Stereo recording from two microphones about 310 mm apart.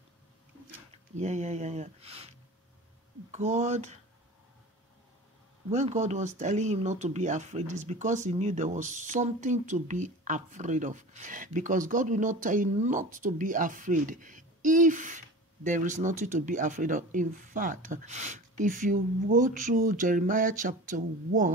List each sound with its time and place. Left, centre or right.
1.1 s speech: right
5.7 s speech: right